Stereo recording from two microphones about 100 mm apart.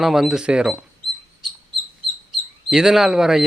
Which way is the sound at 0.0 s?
5° right (ahead or behind).